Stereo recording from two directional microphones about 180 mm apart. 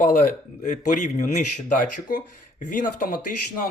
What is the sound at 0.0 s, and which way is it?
Speech, 45° left (ahead or behind).